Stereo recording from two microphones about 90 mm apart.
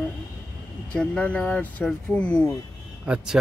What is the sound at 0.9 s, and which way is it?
Speech, 15° left (ahead or behind).